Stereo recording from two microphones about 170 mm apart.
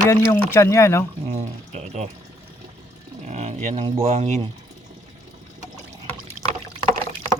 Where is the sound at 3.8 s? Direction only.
35° right (ahead or behind).